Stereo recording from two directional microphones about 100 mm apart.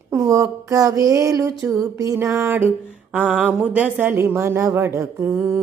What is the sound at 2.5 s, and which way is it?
Speech, 20° right (ahead or behind).